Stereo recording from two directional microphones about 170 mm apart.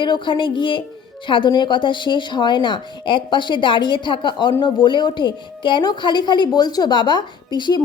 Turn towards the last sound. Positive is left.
turn(degrees=25)  # may be behind; listen again after turning